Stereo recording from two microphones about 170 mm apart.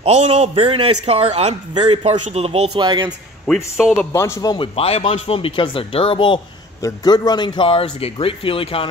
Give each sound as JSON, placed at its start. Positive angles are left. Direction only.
{"t": 0.0, "sound": "a man's voice", "side_deg": -40}
{"t": 3.4, "sound": "speech", "side_deg": 0}
{"t": 4.1, "sound": "a man's voice", "side_deg": 15}
{"t": 4.7, "sound": "a man's voice", "side_deg": 35}